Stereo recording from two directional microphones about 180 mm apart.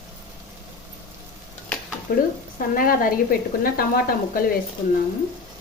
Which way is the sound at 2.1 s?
55° left (ahead or behind).